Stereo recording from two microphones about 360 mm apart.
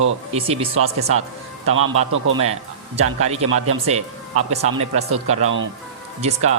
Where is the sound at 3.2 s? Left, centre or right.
Centre.